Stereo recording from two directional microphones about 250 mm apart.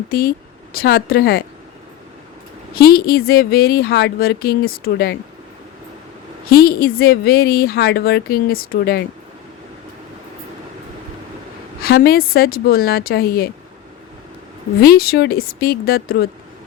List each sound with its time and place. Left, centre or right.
0.1 s a woman's voice: left
2.7 s speech: left
6.5 s speech: left
11.8 s speech: left
14.8 s speech: left